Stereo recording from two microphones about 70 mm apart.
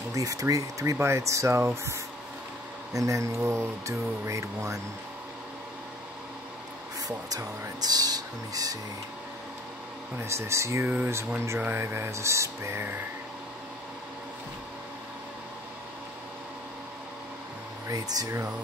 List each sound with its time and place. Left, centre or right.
0.1 s speech: right
0.9 s speech: right
2.9 s speech: right
7.1 s speech: right
10.2 s speech: right
17.8 s speech: right